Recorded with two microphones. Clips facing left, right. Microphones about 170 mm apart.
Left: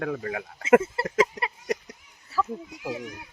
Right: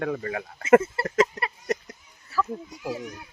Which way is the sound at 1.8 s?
Centre (ahead or behind).